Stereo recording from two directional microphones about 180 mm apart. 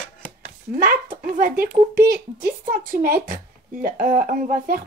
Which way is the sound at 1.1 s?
50° right (ahead or behind).